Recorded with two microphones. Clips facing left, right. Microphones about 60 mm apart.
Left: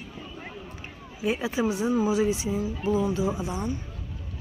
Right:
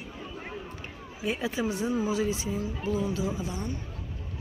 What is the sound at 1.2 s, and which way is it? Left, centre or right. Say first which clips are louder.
Speech: left 4 dB; centre.